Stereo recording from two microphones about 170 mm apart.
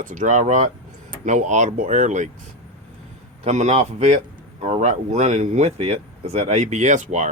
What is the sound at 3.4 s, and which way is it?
Speech, 40° right (ahead or behind).